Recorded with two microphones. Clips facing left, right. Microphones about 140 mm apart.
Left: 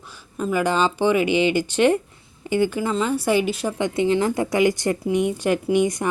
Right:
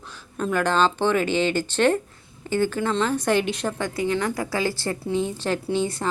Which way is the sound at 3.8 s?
20° left (ahead or behind).